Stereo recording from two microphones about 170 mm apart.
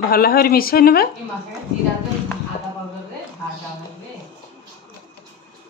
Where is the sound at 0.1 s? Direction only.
65° left (ahead or behind).